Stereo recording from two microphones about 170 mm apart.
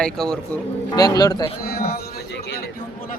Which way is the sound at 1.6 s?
65° left (ahead or behind).